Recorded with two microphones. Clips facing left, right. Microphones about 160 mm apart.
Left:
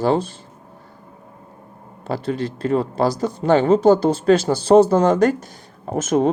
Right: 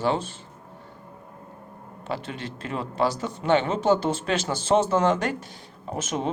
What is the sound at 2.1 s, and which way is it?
Speech, 40° left (ahead or behind).